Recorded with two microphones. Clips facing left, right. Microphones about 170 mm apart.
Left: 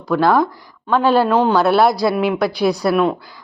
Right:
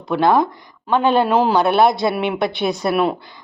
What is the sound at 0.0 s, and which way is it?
Speech, 20° right (ahead or behind).